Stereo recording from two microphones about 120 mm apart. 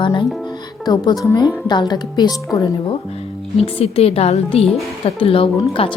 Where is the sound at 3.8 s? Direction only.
55° left (ahead or behind).